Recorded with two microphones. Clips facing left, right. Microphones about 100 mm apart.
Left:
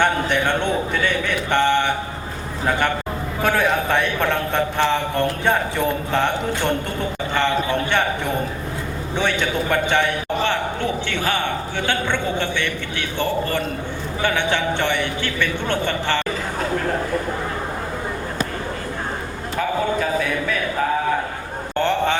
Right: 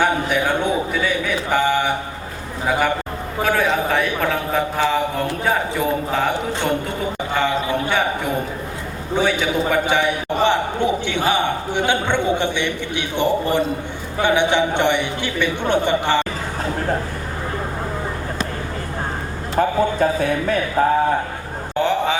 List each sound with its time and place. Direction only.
0.0 s a man's voice: 5° right (ahead or behind)
9.1 s a man's voice: 10° right (ahead or behind)
19.5 s a man's voice: 35° right (ahead or behind)
21.8 s speech: 5° right (ahead or behind)